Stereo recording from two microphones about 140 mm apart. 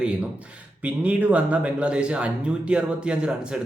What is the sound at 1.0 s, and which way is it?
Speech, 10° right (ahead or behind).